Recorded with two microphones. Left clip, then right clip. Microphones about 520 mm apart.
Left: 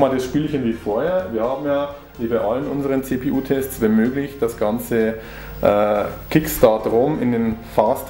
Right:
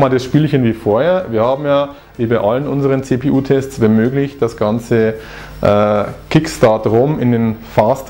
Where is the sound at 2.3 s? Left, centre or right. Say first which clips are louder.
Right 5 dB; right.